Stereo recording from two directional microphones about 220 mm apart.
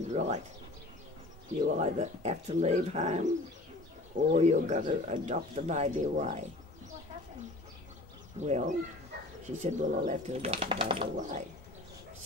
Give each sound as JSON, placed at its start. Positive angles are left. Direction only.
{"t": 0.1, "sound": "speech", "side_deg": -30}
{"t": 1.6, "sound": "speech", "side_deg": -30}
{"t": 4.4, "sound": "speech", "side_deg": -35}
{"t": 8.4, "sound": "speech", "side_deg": -30}